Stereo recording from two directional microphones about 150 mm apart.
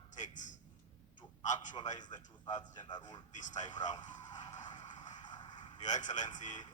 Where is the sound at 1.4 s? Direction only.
55° left (ahead or behind).